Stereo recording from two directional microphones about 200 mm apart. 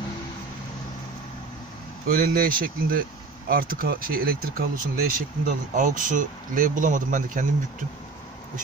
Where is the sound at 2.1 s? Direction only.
45° right (ahead or behind).